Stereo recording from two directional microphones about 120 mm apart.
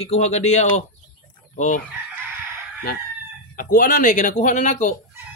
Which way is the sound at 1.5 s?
90° left.